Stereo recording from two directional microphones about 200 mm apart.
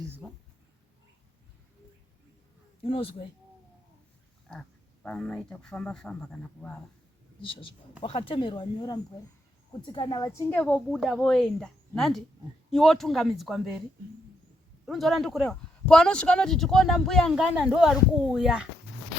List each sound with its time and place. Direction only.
2.8 s speech: 30° left (ahead or behind)
5.0 s speech: 5° left (ahead or behind)
7.4 s speech: 25° left (ahead or behind); by 13.7 s centre (ahead or behind)
14.8 s speech: centre (ahead or behind)